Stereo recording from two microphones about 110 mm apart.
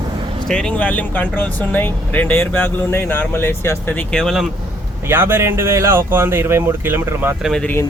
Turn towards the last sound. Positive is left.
turn(degrees=5)  # may be behind; listen again after turning